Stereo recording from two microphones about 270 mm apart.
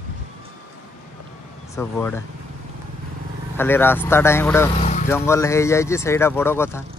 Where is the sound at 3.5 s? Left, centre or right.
Centre.